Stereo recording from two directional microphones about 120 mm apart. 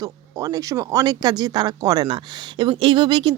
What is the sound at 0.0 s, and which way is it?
Speech, 30° right (ahead or behind).